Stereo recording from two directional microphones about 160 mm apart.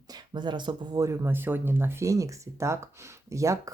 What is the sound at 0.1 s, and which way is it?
Speech, 30° right (ahead or behind).